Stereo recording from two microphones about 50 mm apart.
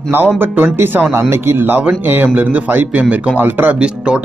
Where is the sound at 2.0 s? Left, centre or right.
Right.